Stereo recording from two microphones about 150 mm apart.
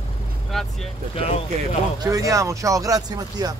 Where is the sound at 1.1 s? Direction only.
40° left (ahead or behind).